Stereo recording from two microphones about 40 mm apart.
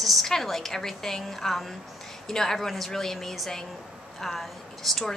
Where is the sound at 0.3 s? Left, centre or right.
Centre.